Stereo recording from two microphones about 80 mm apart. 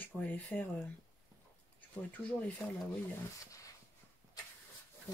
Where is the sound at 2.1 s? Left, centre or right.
Centre.